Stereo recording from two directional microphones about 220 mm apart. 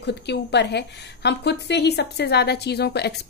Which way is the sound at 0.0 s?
50° left (ahead or behind).